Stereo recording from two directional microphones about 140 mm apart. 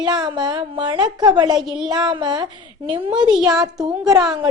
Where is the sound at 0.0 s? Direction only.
30° right (ahead or behind).